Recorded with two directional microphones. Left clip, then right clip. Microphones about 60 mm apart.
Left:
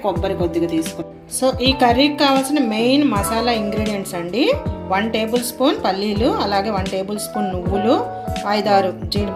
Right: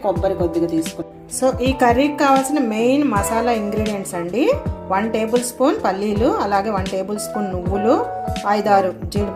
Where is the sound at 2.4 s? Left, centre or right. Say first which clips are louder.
Even; centre.